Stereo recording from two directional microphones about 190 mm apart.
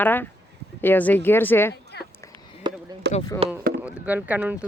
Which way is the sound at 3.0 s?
65° right (ahead or behind).